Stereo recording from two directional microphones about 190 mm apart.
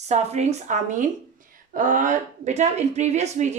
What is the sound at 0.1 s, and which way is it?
A woman's voice, 35° right (ahead or behind).